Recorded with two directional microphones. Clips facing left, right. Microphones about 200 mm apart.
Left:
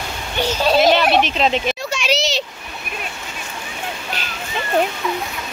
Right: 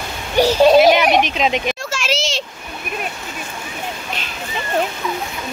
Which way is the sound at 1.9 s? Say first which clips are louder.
Left 2 dB; centre (ahead or behind).